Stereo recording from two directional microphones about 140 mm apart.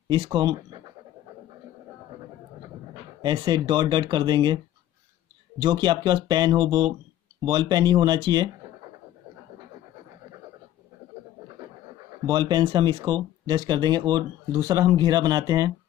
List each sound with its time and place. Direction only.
0.1 s speech: 35° right (ahead or behind)
3.2 s speech: 30° right (ahead or behind)
5.6 s speech: 35° right (ahead or behind)
12.3 s speech: 35° right (ahead or behind)